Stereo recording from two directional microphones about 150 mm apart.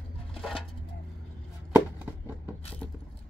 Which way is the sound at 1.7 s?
10° right (ahead or behind).